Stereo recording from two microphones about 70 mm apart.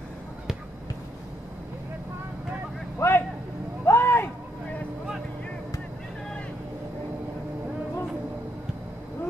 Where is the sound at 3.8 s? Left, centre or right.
Left.